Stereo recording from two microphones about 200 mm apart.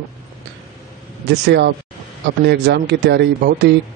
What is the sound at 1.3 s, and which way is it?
Speech, 55° right (ahead or behind).